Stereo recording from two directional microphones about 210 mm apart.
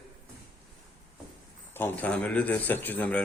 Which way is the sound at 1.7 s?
10° left (ahead or behind).